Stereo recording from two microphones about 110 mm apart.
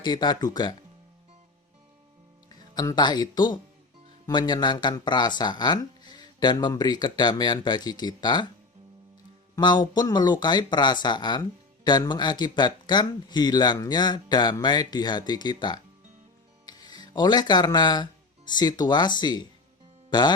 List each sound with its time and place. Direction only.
0.0 s speech: 40° left (ahead or behind)
2.5 s speech: 40° left (ahead or behind)
9.6 s speech: 40° left (ahead or behind)